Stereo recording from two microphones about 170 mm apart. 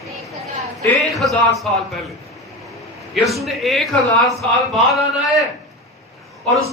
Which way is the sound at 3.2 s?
Centre (ahead or behind).